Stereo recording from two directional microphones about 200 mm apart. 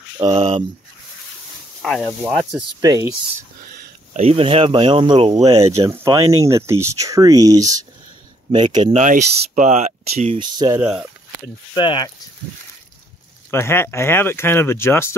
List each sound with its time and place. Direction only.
0.2 s speech: 30° right (ahead or behind)
1.8 s speech: 5° left (ahead or behind)
2.8 s speech: 20° right (ahead or behind)
3.7 s speech: 35° right (ahead or behind)
8.9 s speech: 40° right (ahead or behind); by 10.8 s 20° right (ahead or behind)
10.8 s speech: 5° right (ahead or behind)
11.7 s speech: 20° left (ahead or behind)
13.5 s speech: 10° left (ahead or behind)